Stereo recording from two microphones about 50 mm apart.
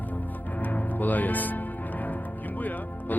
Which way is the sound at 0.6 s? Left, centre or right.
Left.